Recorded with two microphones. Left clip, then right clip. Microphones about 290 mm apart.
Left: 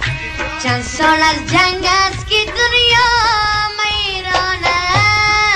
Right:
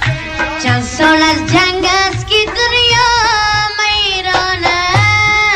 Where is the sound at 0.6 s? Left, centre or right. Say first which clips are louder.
Right 2 dB; centre.